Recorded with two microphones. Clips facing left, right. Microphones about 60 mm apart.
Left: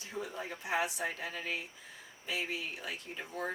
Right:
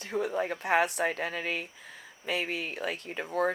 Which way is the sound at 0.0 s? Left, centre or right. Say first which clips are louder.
Right 10 dB; right.